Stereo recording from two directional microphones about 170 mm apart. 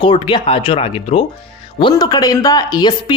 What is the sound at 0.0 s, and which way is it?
Speech, 30° left (ahead or behind).